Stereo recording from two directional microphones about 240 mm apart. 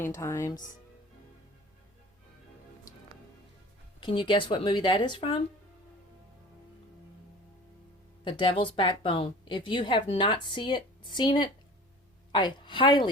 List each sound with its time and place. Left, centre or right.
0.0 s speech: centre
4.0 s a woman's voice: left
8.2 s a woman's voice: centre